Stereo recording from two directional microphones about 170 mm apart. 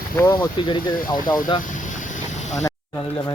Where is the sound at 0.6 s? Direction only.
30° left (ahead or behind).